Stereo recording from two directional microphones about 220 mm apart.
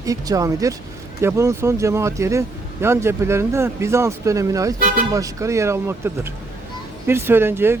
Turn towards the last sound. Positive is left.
turn(degrees=-10)  # may be behind; listen again after turning